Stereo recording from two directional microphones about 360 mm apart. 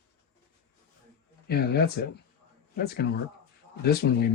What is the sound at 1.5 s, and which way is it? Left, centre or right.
Speech, left.